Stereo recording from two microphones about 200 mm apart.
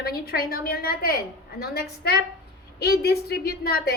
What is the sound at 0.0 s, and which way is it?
A woman's voice, 50° left (ahead or behind).